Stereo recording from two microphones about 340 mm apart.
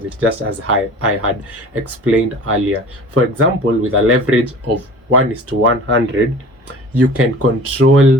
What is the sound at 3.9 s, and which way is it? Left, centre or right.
Speech, right.